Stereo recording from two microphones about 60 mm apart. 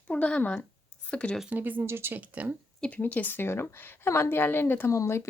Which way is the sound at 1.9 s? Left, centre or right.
Right.